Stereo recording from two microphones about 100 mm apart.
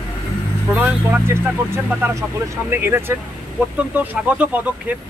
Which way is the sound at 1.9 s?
20° right (ahead or behind).